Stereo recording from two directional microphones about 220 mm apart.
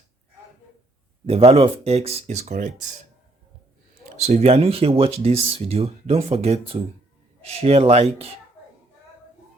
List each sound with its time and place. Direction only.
1.3 s speech: 25° right (ahead or behind)
4.2 s speech: 30° right (ahead or behind)